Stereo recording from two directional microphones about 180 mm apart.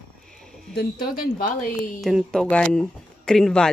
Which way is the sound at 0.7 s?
55° left (ahead or behind).